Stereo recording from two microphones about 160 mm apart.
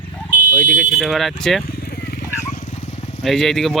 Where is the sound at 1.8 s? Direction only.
85° left.